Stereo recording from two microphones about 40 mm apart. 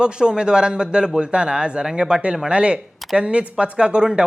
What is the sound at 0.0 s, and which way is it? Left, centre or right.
Speech, right.